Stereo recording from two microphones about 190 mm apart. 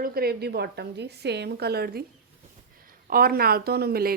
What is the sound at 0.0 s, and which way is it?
A woman's voice, 55° right (ahead or behind).